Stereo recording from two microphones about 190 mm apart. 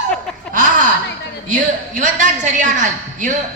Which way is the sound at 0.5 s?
45° right (ahead or behind).